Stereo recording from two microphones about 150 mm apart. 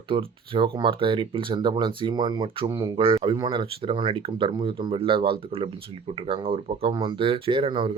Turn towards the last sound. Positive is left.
turn(degrees=-35)  # may be behind; listen again after turning